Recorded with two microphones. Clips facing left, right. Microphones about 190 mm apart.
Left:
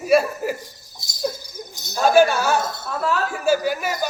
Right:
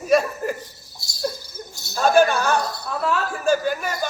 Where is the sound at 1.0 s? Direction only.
20° left (ahead or behind).